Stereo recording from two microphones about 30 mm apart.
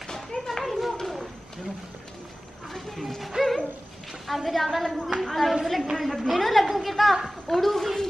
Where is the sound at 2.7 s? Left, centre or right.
Centre.